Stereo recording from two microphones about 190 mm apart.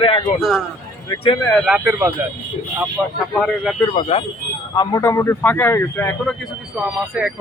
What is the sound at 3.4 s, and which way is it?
Speech, centre (ahead or behind).